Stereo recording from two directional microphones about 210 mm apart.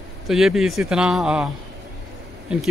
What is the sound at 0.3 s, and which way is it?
Speech, centre (ahead or behind).